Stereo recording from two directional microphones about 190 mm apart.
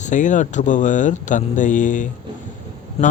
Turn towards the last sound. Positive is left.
turn(degrees=35)  # may be behind; listen again after turning